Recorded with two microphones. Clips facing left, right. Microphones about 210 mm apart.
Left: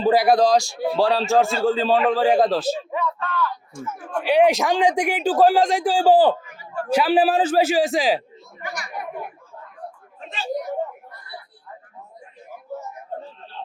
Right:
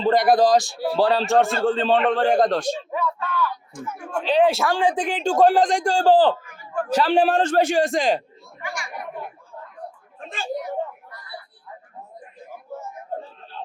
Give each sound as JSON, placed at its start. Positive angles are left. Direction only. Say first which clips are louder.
{"t": 0.0, "sound": "a man's voice", "louder": "even", "side_deg": 5}
{"t": 4.2, "sound": "speech", "louder": "left 2 dB", "side_deg": 10}
{"t": 6.4, "sound": "a sound", "louder": "right 3 dB", "side_deg": -50}
{"t": 6.9, "sound": "a man's voice", "louder": "left 1 dB", "side_deg": 5}
{"t": 8.6, "sound": "speech", "louder": "even", "side_deg": 40}